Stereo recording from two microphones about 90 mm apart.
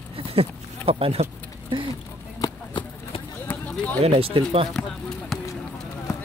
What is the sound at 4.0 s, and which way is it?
Speech, 90° right.